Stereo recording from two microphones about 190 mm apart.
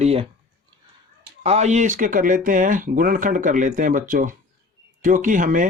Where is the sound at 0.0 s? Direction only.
30° right (ahead or behind).